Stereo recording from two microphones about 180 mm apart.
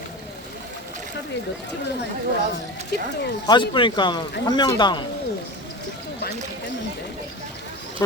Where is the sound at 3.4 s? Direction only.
25° left (ahead or behind).